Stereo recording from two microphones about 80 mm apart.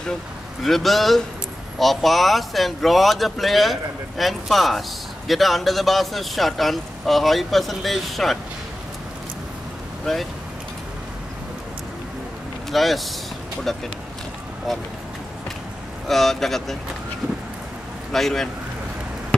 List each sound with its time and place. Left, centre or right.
0.7 s speech: centre
12.7 s speech: centre
16.1 s speech: centre
18.1 s speech: centre